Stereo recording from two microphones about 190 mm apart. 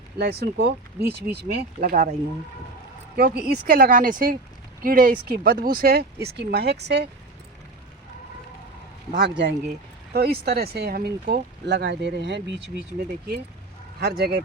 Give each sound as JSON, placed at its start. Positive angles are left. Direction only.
{"t": 0.2, "sound": "speech", "side_deg": -55}
{"t": 3.2, "sound": "speech", "side_deg": -55}
{"t": 9.1, "sound": "speech", "side_deg": -65}
{"t": 14.0, "sound": "speech", "side_deg": -55}